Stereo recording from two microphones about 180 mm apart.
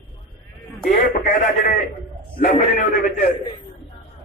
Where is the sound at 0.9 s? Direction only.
50° left (ahead or behind).